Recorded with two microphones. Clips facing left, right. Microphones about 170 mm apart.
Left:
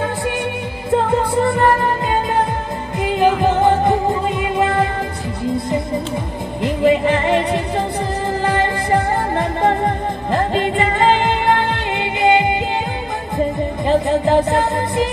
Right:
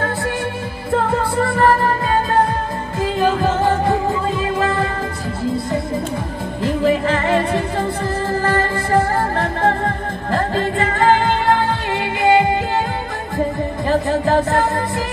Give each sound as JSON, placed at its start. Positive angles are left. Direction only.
{"t": 0.9, "sound": "music", "side_deg": 20}
{"t": 3.0, "sound": "music", "side_deg": 20}
{"t": 6.6, "sound": "music", "side_deg": 20}
{"t": 9.6, "sound": "music", "side_deg": 15}
{"t": 12.2, "sound": "music", "side_deg": 20}
{"t": 13.8, "sound": "music", "side_deg": 20}